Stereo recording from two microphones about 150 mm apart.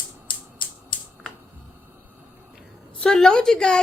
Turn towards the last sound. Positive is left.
turn(degrees=5)  # may be behind; listen again after turning